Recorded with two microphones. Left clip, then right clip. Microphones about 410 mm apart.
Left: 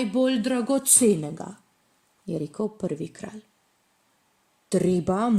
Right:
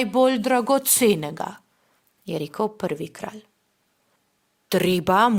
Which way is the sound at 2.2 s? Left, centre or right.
Centre.